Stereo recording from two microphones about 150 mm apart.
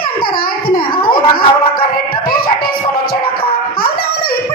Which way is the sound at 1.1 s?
80° left.